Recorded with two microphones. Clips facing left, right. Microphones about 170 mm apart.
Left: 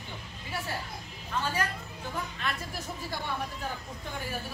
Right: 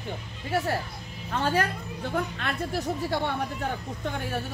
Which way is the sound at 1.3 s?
60° right (ahead or behind).